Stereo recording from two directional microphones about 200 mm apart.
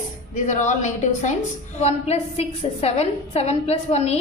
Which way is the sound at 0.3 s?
40° left (ahead or behind).